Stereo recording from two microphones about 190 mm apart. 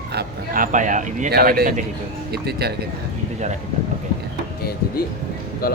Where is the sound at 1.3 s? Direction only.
55° right (ahead or behind).